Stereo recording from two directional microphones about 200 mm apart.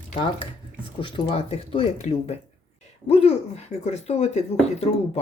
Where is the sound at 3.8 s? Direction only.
35° left (ahead or behind).